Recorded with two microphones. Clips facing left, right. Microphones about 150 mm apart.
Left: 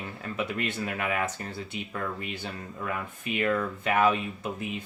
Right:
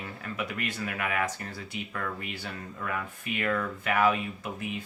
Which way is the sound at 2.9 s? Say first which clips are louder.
Left 3 dB; 20° left (ahead or behind).